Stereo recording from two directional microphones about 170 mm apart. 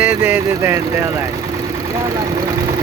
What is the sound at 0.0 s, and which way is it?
Speech, 10° right (ahead or behind).